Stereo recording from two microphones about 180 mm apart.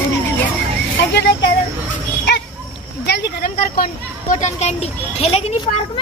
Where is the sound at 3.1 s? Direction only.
65° left (ahead or behind).